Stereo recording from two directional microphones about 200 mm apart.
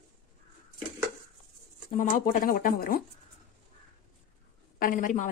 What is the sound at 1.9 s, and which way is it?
Speech, 45° left (ahead or behind).